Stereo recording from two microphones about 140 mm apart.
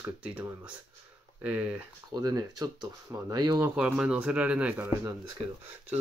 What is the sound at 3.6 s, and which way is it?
Speech, 10° right (ahead or behind).